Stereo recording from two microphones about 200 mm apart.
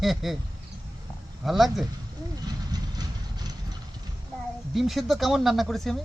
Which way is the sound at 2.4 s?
20° right (ahead or behind).